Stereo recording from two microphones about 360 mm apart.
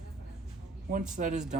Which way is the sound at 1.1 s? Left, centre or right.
Centre.